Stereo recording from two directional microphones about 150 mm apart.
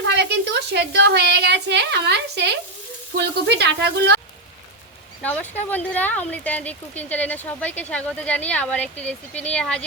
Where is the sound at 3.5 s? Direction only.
90° right.